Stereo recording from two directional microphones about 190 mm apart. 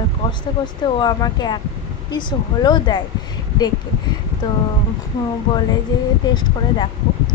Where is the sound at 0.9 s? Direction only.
20° left (ahead or behind).